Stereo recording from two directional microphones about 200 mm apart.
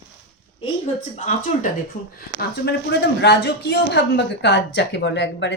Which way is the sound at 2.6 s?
60° left (ahead or behind).